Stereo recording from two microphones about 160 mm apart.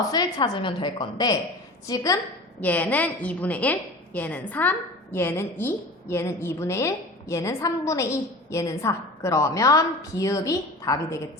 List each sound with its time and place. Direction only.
0.1 s a woman's voice: 25° left (ahead or behind)
2.6 s a woman's voice: 10° left (ahead or behind)